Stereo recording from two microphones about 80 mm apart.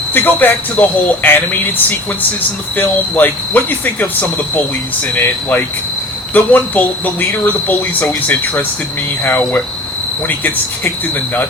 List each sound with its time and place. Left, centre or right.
0.1 s speech: left